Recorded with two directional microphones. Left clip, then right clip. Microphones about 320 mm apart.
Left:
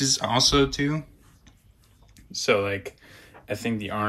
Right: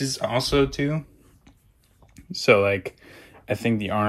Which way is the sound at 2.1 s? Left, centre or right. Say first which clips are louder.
Right 5 dB; centre.